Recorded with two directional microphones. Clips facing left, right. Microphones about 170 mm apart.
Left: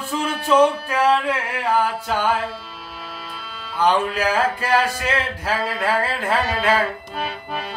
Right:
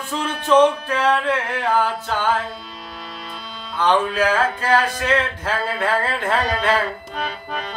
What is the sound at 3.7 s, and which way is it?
Music, 10° left (ahead or behind).